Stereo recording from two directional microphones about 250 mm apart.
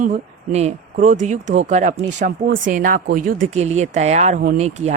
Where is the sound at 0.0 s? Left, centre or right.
Right.